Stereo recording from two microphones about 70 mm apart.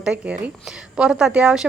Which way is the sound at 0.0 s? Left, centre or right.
Centre.